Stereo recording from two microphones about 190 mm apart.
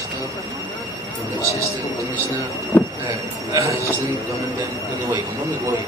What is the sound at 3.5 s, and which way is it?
Speech, 15° right (ahead or behind).